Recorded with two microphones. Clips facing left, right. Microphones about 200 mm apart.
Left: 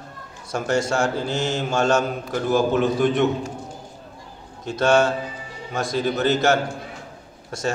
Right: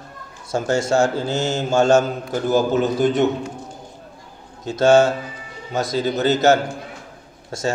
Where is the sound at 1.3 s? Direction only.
45° right (ahead or behind).